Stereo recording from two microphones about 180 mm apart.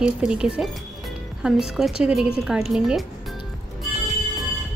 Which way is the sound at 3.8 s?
Centre (ahead or behind).